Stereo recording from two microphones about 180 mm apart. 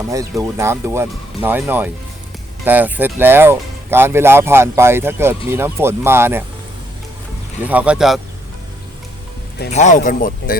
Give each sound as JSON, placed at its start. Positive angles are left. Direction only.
{"t": 0.1, "sound": "speech", "side_deg": -20}
{"t": 7.6, "sound": "speech", "side_deg": -10}
{"t": 9.6, "sound": "speech", "side_deg": 40}